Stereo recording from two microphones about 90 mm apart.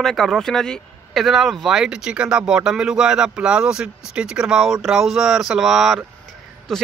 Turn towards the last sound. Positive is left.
turn(degrees=5)  # may be behind; listen again after turning